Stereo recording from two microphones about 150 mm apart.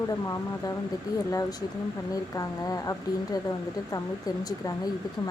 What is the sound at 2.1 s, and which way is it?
Speech, 25° left (ahead or behind).